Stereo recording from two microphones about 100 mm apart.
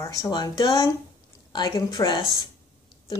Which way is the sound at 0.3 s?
40° left (ahead or behind).